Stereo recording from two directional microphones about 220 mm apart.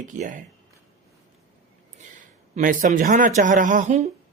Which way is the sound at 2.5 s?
35° right (ahead or behind).